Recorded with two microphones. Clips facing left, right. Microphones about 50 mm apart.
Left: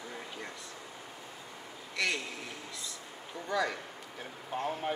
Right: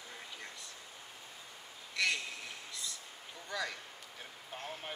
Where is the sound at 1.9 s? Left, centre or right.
Centre.